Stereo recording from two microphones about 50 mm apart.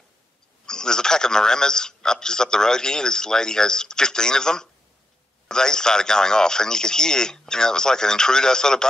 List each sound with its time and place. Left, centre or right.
0.7 s a man's voice: centre